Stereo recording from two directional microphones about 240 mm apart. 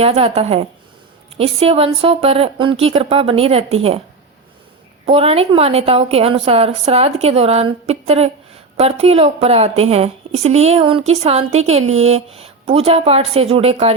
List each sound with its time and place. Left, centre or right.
0.0 s a woman's voice: right
5.0 s a woman's voice: right